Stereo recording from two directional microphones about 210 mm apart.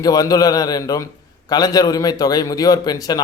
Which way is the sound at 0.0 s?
15° left (ahead or behind).